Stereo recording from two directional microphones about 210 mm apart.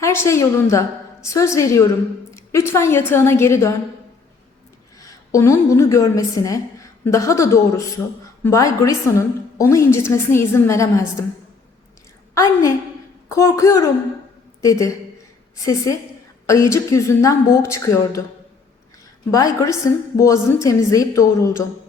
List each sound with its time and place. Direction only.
0.0 s a woman's voice: 15° left (ahead or behind)
4.9 s a woman's voice: 15° left (ahead or behind)
12.3 s a woman's voice: 15° left (ahead or behind)
16.5 s a woman's voice: 15° left (ahead or behind)
19.3 s a woman's voice: 15° left (ahead or behind)